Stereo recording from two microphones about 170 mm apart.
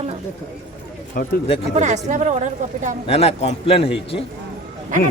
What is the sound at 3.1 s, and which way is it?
Speech, 35° left (ahead or behind).